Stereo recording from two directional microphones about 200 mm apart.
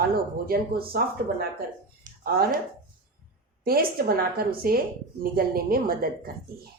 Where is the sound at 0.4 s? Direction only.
50° right (ahead or behind).